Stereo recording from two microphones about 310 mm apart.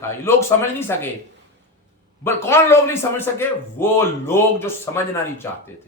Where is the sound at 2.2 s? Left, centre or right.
Centre.